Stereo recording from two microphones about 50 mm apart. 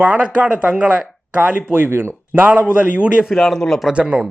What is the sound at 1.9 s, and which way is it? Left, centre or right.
Speech, right.